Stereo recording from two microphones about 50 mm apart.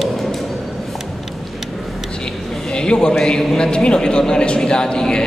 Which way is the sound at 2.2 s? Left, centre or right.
Centre.